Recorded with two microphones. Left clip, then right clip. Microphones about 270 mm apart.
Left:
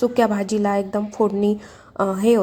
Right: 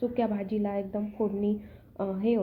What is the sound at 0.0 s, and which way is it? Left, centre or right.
A woman's voice, left.